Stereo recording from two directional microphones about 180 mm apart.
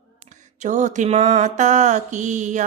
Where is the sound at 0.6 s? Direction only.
40° right (ahead or behind).